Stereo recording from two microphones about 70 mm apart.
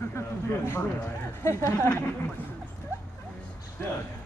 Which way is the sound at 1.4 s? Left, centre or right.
Left.